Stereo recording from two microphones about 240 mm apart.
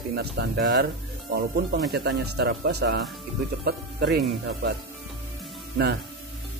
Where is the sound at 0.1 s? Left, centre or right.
Right.